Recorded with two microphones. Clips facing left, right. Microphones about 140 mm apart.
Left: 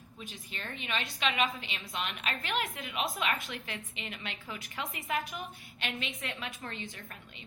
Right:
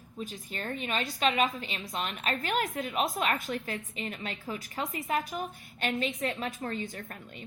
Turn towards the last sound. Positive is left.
turn(degrees=-45)  # may be behind; listen again after turning